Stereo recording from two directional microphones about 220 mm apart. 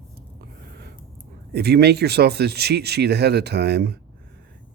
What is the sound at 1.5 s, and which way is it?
Speech, 45° right (ahead or behind).